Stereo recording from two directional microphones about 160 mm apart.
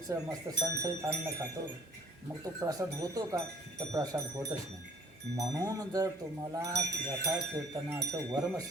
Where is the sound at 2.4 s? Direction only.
20° right (ahead or behind).